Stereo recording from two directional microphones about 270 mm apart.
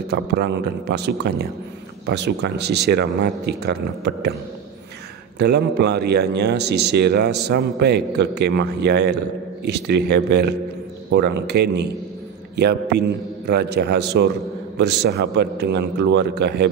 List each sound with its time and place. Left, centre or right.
0.1 s speech: right
5.4 s speech: right